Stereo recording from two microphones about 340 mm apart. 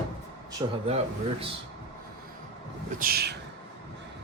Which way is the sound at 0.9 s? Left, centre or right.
Centre.